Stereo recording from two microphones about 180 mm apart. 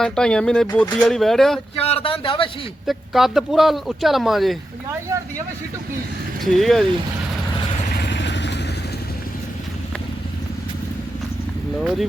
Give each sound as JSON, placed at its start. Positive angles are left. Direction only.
{"t": 0.0, "sound": "speech", "side_deg": 5}
{"t": 1.8, "sound": "speech", "side_deg": 35}
{"t": 2.8, "sound": "speech", "side_deg": 0}
{"t": 6.4, "sound": "speech", "side_deg": 0}
{"t": 7.9, "sound": "vehicle", "side_deg": 75}
{"t": 11.8, "sound": "speech", "side_deg": 0}